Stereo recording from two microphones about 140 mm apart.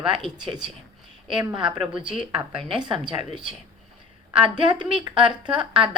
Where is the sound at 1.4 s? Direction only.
35° right (ahead or behind).